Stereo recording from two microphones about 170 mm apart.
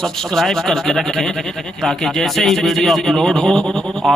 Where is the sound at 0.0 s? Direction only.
Centre (ahead or behind).